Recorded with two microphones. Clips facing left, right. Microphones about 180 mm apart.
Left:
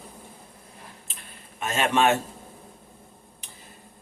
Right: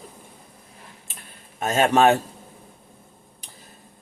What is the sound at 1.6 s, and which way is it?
Speech, 40° right (ahead or behind).